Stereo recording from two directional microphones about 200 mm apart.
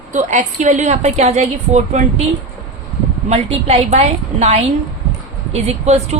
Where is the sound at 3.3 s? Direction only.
30° right (ahead or behind).